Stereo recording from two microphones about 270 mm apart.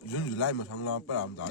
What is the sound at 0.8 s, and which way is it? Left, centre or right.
Speech, left.